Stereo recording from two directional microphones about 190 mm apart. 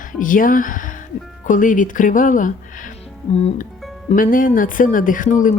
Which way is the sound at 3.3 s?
30° left (ahead or behind).